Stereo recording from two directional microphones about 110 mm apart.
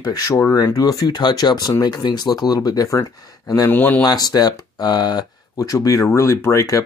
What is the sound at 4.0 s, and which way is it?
Speech, 35° left (ahead or behind).